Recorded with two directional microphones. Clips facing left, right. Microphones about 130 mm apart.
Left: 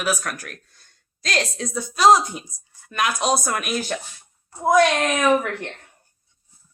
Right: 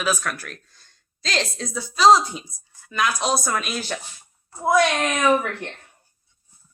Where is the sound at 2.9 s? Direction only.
55° left (ahead or behind).